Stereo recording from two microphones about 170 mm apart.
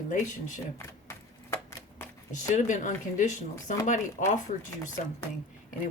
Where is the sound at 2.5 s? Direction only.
50° left (ahead or behind).